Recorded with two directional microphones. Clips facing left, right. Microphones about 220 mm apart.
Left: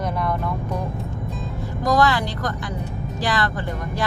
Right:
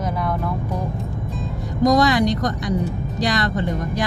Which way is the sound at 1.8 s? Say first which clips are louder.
Right 4 dB; 20° right (ahead or behind).